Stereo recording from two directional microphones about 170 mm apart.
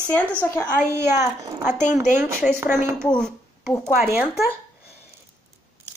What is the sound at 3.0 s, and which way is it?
Speech, 5° left (ahead or behind).